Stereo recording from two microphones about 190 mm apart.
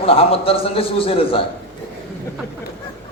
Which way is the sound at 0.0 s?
30° left (ahead or behind).